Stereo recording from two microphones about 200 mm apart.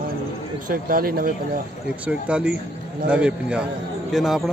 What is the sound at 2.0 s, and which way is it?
A man's voice, 5° right (ahead or behind).